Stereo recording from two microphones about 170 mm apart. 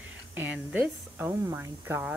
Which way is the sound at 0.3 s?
10° right (ahead or behind).